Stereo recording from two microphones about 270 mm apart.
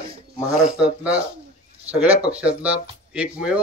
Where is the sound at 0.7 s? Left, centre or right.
Centre.